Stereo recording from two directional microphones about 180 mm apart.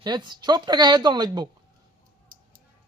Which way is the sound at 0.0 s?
25° right (ahead or behind).